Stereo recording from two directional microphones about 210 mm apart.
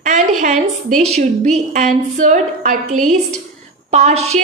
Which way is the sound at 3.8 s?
35° right (ahead or behind).